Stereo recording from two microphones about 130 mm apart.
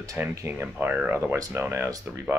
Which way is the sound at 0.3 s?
20° right (ahead or behind).